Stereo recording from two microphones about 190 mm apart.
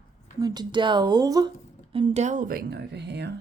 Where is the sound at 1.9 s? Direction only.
30° right (ahead or behind); by 3.3 s 60° right (ahead or behind).